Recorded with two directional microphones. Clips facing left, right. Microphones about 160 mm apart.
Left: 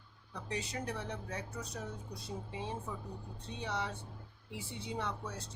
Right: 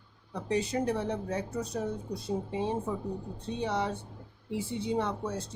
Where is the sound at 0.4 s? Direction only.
30° right (ahead or behind).